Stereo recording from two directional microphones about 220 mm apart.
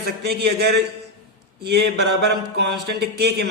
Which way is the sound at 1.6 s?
50° right (ahead or behind).